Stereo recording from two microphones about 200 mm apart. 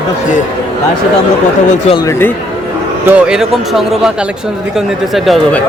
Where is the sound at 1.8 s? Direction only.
25° left (ahead or behind).